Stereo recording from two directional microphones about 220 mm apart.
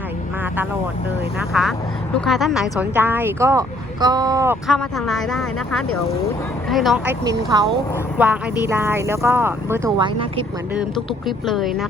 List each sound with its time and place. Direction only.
1.5 s a woman's voice: 5° right (ahead or behind)
4.7 s a woman's voice: centre (ahead or behind)
10.0 s speech: 25° right (ahead or behind)
11.3 s a woman's voice: centre (ahead or behind)